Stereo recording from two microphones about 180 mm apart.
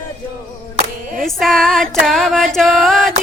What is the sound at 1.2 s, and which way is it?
Female singing, centre (ahead or behind).